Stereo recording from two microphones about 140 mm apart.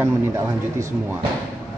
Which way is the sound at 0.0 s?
20° right (ahead or behind).